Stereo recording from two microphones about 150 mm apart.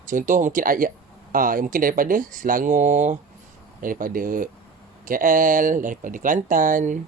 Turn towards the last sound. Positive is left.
turn(degrees=-60)  # may be behind; listen again after turning